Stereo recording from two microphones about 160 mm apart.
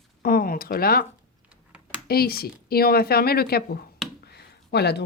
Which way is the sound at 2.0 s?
75° left (ahead or behind).